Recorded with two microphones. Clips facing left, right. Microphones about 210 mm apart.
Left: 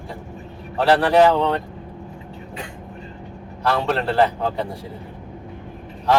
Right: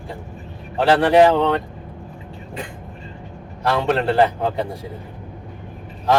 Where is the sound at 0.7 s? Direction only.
15° right (ahead or behind).